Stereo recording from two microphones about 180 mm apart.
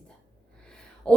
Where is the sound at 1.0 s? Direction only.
5° left (ahead or behind).